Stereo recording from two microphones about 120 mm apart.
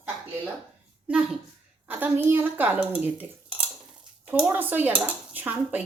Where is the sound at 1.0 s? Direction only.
10° right (ahead or behind).